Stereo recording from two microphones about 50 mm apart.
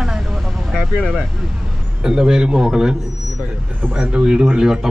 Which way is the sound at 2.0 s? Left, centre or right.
Centre.